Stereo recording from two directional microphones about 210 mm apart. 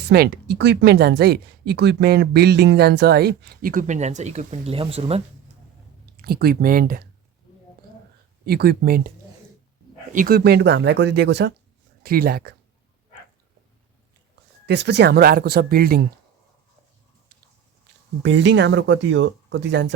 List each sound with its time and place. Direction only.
0.0 s speech: 50° right (ahead or behind); by 5.2 s 30° right (ahead or behind)
6.1 s speech: 45° right (ahead or behind)
8.4 s speech: 45° right (ahead or behind)
12.0 s speech: 45° right (ahead or behind)
14.7 s speech: 55° right (ahead or behind)
18.2 s speech: 55° right (ahead or behind)